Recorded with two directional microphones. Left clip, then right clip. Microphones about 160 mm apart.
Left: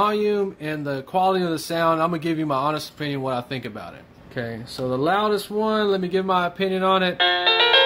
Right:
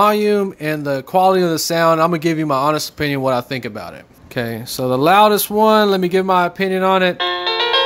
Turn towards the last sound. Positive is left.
turn(degrees=-5)  # may be behind; listen again after turning